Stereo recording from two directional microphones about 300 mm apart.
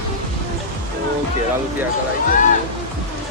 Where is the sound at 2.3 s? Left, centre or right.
Left.